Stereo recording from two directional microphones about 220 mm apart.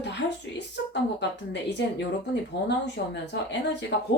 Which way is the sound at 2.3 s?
50° left (ahead or behind).